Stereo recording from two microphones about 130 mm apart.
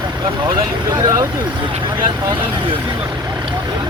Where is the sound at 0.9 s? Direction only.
30° right (ahead or behind).